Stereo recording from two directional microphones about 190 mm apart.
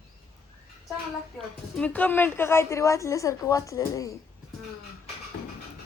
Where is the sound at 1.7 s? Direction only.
10° left (ahead or behind).